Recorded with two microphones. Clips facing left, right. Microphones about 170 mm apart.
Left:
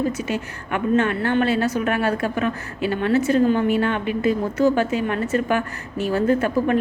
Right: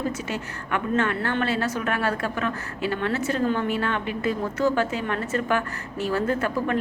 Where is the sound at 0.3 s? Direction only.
15° left (ahead or behind).